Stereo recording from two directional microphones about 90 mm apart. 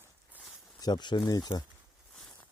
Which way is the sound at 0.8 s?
55° left (ahead or behind).